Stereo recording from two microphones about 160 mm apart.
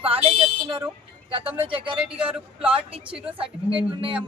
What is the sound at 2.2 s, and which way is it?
Speech, 10° right (ahead or behind).